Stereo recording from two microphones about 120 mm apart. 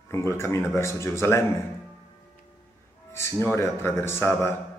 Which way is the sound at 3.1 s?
20° left (ahead or behind).